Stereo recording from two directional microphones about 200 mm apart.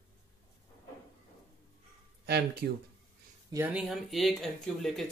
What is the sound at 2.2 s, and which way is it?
Speech, 55° right (ahead or behind).